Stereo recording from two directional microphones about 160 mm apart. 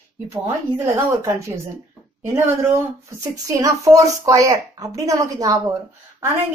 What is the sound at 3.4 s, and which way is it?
A woman's voice, 20° right (ahead or behind).